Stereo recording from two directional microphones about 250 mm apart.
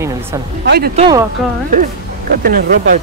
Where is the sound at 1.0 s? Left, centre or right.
Centre.